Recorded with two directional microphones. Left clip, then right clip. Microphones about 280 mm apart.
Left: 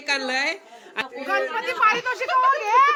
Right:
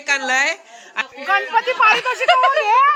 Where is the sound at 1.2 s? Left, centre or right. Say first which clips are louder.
Right 7 dB; centre.